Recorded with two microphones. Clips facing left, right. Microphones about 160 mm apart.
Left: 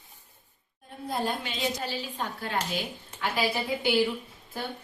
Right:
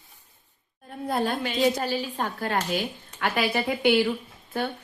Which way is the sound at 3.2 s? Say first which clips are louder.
Right 4 dB; 65° right (ahead or behind).